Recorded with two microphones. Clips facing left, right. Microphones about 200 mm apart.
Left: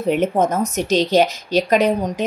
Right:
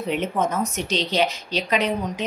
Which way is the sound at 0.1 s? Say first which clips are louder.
Left 6 dB; 45° left (ahead or behind).